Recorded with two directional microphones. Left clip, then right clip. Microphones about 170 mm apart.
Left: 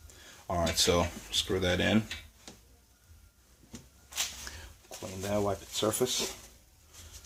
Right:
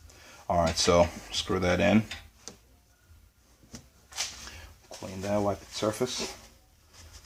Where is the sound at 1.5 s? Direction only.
35° right (ahead or behind).